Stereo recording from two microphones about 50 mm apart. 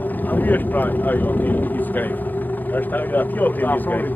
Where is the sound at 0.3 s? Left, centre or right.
Left.